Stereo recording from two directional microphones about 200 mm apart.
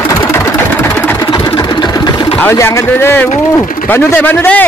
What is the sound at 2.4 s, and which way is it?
Speech, 15° left (ahead or behind).